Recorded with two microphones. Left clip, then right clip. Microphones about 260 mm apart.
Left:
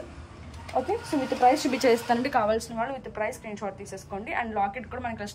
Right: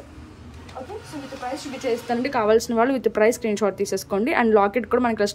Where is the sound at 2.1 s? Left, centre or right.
Centre.